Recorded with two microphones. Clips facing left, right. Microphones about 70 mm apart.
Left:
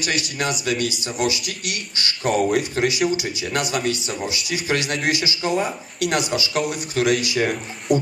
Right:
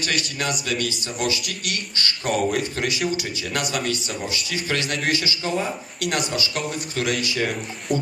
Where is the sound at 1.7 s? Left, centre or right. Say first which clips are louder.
Right 2 dB; centre.